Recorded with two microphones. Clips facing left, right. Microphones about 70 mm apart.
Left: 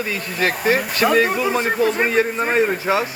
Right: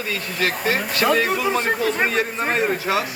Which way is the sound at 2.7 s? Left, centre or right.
Left.